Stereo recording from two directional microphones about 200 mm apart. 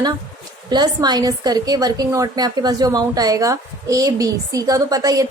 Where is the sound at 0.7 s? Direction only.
20° right (ahead or behind).